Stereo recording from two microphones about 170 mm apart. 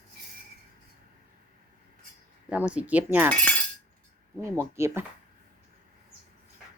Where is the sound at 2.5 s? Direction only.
5° right (ahead or behind).